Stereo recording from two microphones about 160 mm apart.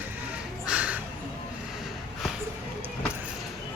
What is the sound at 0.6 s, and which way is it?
Crow, 10° right (ahead or behind).